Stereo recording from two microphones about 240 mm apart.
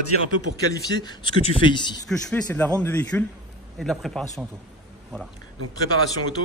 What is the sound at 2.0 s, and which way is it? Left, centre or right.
A man's voice, centre.